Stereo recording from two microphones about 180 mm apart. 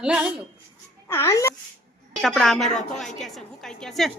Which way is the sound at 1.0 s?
15° left (ahead or behind).